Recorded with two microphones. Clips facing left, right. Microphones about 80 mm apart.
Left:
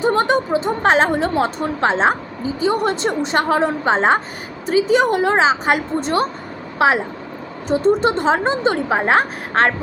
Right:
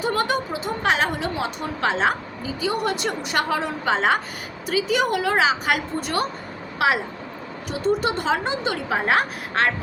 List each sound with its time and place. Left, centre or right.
0.0 s a woman's voice: left